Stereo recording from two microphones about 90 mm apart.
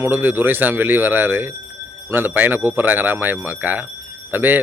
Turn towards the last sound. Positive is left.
turn(degrees=-20)  # may be behind; listen again after turning